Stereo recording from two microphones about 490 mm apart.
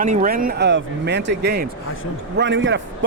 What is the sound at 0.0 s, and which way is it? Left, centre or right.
A man's voice, centre.